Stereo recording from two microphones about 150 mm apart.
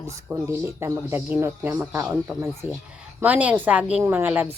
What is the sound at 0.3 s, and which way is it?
Speech, 15° right (ahead or behind).